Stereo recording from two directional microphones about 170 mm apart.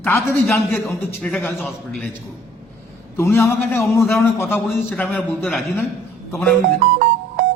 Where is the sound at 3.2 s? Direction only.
15° left (ahead or behind).